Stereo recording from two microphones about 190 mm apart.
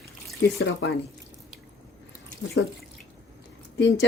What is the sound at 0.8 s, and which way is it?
Speech, 65° left (ahead or behind).